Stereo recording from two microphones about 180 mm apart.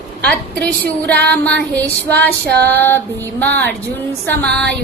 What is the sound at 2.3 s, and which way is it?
Female singing, 65° right (ahead or behind).